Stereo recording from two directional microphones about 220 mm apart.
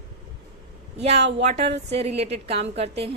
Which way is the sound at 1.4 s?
30° right (ahead or behind).